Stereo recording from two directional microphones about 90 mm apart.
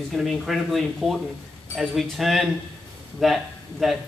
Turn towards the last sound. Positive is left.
turn(degrees=0)  # may be behind; listen again after turning